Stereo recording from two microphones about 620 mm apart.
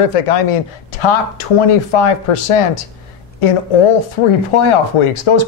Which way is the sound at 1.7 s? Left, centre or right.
Left.